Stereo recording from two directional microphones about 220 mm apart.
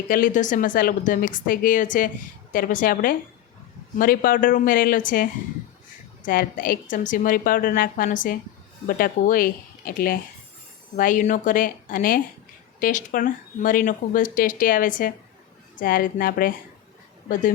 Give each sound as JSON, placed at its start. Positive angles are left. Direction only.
{"t": 0.1, "sound": "speech", "side_deg": 40}